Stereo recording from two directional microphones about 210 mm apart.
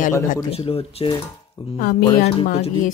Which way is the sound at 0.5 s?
30° left (ahead or behind).